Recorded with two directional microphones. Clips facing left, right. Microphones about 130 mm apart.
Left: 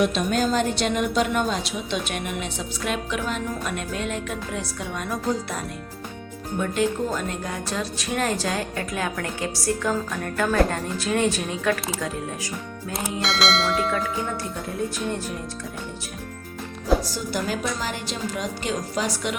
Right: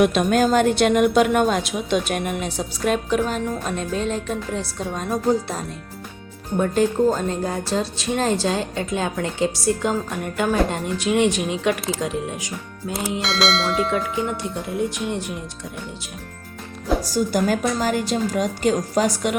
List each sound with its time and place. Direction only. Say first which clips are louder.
0.0 s a woman's voice: right 5 dB; 55° right (ahead or behind); by 5.5 s 30° right (ahead or behind)
6.6 s a woman's voice: right 5 dB; 35° right (ahead or behind); by 12.5 s 20° right (ahead or behind)
13.2 s speech: even; centre (ahead or behind)
14.2 s speech: right 4 dB; 15° right (ahead or behind)
17.0 s a woman's voice: right 7 dB; 45° right (ahead or behind)